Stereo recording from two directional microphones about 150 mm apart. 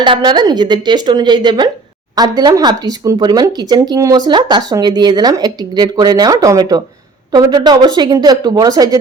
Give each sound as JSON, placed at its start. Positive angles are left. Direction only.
{"t": 0.0, "sound": "speech", "side_deg": -30}